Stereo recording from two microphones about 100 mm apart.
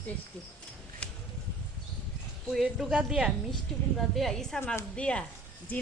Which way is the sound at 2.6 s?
10° right (ahead or behind).